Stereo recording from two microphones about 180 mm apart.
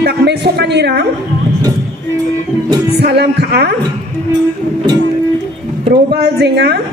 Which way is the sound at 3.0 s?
65° right (ahead or behind).